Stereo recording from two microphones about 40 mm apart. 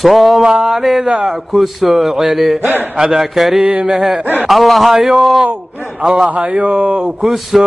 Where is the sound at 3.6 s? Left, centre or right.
Right.